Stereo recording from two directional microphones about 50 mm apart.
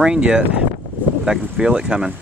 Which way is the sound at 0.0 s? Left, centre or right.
Centre.